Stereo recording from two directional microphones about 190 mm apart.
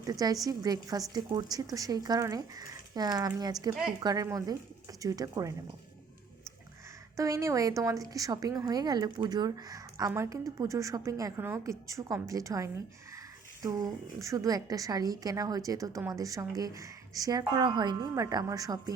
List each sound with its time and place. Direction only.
0.0 s speech: 20° right (ahead or behind)
7.2 s a woman's voice: 15° right (ahead or behind)